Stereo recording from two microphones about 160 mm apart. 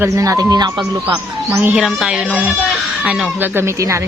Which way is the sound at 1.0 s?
10° right (ahead or behind).